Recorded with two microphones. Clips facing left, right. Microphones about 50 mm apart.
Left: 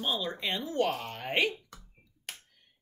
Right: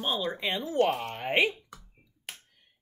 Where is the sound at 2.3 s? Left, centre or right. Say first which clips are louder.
Even; centre.